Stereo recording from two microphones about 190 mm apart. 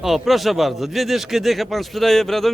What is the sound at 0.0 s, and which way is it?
Speech, centre (ahead or behind).